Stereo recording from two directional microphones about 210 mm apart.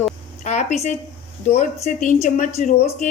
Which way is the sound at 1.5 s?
30° left (ahead or behind).